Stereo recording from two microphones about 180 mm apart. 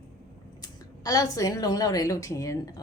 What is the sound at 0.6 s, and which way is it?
A woman's voice, 20° left (ahead or behind).